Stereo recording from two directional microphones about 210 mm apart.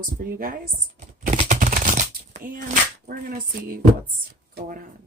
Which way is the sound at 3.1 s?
40° right (ahead or behind).